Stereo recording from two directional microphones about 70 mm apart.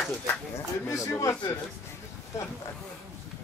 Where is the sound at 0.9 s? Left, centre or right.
Left.